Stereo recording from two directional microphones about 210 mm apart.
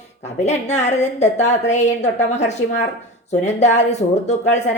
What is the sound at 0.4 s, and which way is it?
A woman's voice, 30° left (ahead or behind).